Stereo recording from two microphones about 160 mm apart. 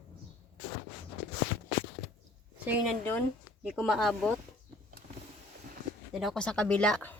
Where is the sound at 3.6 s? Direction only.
Centre (ahead or behind).